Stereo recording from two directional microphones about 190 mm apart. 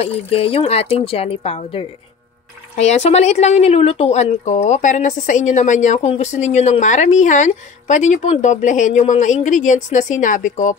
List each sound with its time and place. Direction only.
0.0 s speech: 30° left (ahead or behind)